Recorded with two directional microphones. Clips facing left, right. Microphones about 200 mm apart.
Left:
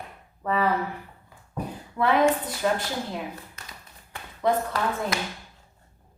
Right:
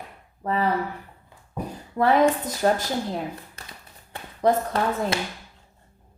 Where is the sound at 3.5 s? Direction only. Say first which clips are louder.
Right 1 dB; 30° right (ahead or behind).